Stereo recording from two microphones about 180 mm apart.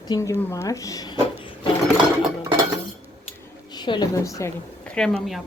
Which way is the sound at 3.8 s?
25° left (ahead or behind).